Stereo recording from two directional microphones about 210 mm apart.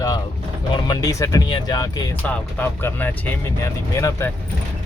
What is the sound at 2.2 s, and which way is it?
Speech, 10° left (ahead or behind).